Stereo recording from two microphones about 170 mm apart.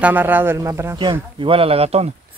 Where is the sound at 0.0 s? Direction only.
10° right (ahead or behind).